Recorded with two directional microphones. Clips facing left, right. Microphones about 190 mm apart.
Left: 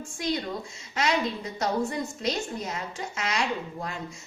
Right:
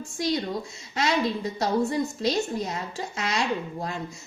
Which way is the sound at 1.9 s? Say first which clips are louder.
Right 4 dB; 30° right (ahead or behind).